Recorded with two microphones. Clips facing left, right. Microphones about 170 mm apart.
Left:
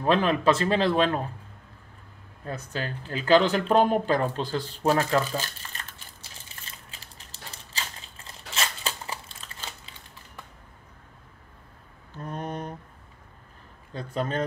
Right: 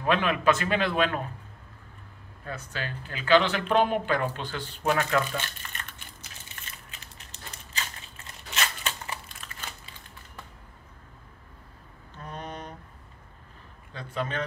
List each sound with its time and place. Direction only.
0.0 s speech: 35° left (ahead or behind)
2.4 s speech: 40° left (ahead or behind)
6.2 s crushing: 30° left (ahead or behind)
8.5 s a sound: 30° left (ahead or behind)
12.3 s a sound: 50° left (ahead or behind)
13.9 s speech: 40° left (ahead or behind)